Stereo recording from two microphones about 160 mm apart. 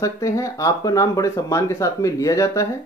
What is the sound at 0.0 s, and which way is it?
Speech, 20° left (ahead or behind).